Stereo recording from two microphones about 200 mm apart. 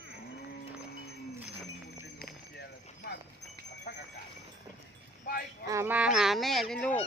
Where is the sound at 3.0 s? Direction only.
55° left (ahead or behind).